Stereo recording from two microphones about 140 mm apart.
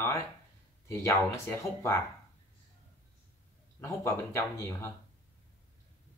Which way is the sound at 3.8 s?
20° left (ahead or behind).